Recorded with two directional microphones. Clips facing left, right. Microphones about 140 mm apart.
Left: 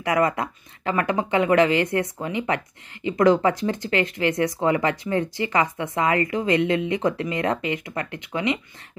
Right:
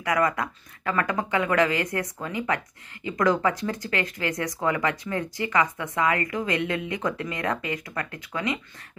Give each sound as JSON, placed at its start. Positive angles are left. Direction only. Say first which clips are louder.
{"t": 0.0, "sound": "speech", "louder": "left 3 dB", "side_deg": 25}